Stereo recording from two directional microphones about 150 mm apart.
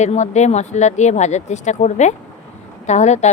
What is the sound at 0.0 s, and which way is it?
Speech, 50° left (ahead or behind).